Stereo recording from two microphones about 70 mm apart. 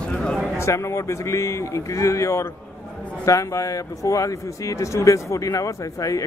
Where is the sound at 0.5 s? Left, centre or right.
Left.